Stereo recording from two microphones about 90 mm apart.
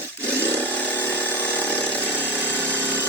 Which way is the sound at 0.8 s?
20° left (ahead or behind).